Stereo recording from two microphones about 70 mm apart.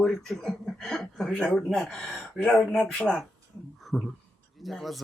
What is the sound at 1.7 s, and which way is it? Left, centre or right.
Speech, centre.